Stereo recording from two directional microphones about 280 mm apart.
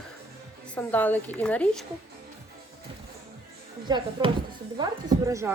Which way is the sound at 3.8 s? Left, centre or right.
Centre.